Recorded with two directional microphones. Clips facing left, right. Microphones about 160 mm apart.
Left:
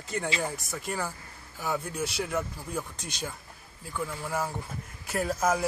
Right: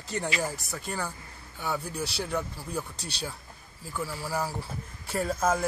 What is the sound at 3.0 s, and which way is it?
Speech, 35° right (ahead or behind).